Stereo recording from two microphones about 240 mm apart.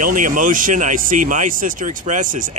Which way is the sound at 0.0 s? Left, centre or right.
Right.